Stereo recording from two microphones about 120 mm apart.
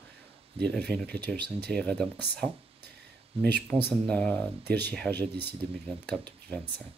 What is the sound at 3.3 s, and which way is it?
Speech, 55° right (ahead or behind).